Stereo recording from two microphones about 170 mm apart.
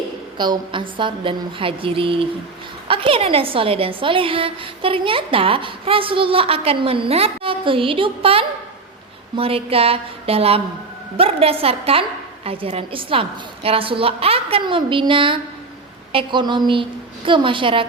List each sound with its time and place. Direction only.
0.3 s a woman's voice: 25° right (ahead or behind)